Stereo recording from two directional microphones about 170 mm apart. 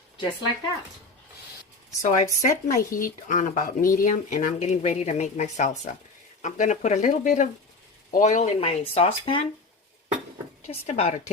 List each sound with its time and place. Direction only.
2.0 s speech: 45° left (ahead or behind)
10.7 s speech: 40° left (ahead or behind)